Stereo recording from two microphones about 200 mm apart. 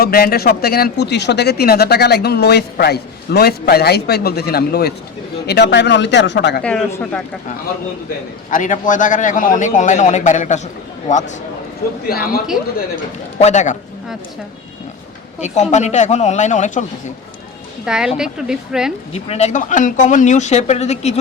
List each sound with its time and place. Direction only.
0.0 s speech: 50° left (ahead or behind)
6.6 s speech: 5° left (ahead or behind)
8.4 s a man's voice: 40° left (ahead or behind)
12.0 s speech: 50° left (ahead or behind)
13.4 s a man's voice: 35° left (ahead or behind)
15.4 s a man's voice: 35° left (ahead or behind)
17.8 s speech: 5° right (ahead or behind)
19.1 s a man's voice: 30° left (ahead or behind)